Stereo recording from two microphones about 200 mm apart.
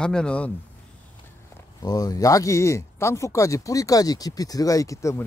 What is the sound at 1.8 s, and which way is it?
Speech, 20° left (ahead or behind).